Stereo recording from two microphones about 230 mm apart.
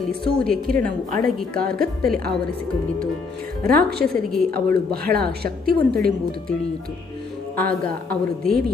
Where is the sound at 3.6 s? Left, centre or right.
Right.